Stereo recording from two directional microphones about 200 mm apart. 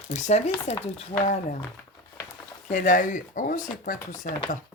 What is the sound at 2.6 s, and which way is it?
Speech, 40° left (ahead or behind).